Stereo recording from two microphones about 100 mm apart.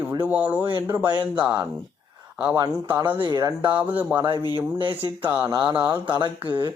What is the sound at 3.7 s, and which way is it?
Speech, 15° right (ahead or behind).